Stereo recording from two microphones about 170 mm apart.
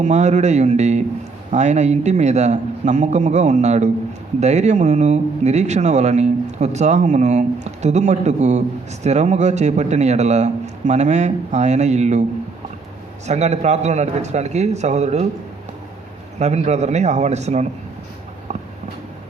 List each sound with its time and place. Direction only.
0.0 s a man's voice: 40° right (ahead or behind)
13.2 s a man's voice: 40° right (ahead or behind)
16.4 s a man's voice: 40° right (ahead or behind)